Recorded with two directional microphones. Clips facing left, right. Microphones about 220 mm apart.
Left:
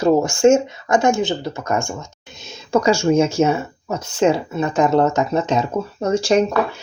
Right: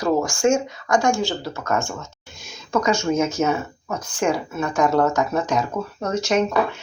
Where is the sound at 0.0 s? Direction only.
25° left (ahead or behind).